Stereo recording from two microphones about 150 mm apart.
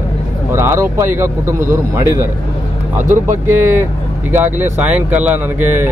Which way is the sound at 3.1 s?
15° right (ahead or behind).